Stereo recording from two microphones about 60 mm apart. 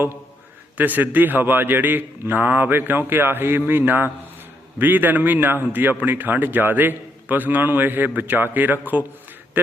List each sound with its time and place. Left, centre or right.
0.8 s a man's voice: right